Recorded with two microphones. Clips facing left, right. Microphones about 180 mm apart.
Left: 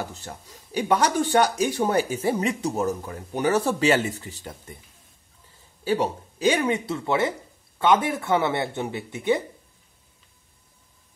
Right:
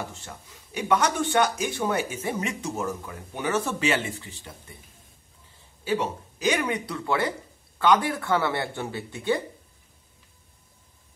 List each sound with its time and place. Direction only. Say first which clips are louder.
0.1 s speech: left 3 dB; 35° left (ahead or behind)
5.9 s speech: left 3 dB; 35° left (ahead or behind)